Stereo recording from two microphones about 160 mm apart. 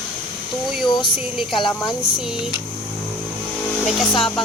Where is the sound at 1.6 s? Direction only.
30° left (ahead or behind).